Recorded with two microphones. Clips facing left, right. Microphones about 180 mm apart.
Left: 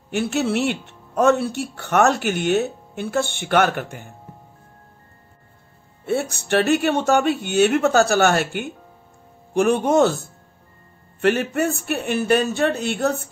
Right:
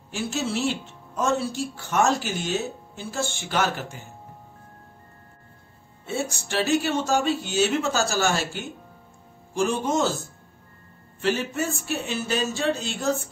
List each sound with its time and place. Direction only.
0.1 s speech: 65° left (ahead or behind)
6.0 s speech: 60° left (ahead or behind)